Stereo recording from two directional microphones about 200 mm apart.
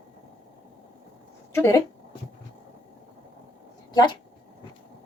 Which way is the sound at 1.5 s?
15° left (ahead or behind).